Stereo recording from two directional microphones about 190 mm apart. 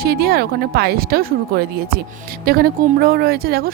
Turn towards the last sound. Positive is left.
turn(degrees=-55)  # may be behind; listen again after turning